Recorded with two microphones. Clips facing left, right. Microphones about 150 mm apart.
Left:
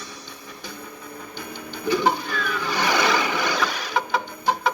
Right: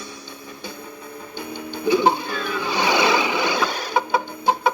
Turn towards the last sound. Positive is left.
turn(degrees=-25)  # may be behind; listen again after turning